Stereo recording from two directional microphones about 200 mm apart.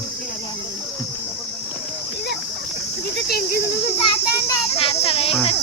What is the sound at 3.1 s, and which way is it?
Speech, 50° left (ahead or behind).